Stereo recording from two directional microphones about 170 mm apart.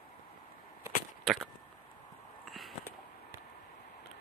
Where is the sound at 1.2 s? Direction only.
Centre (ahead or behind).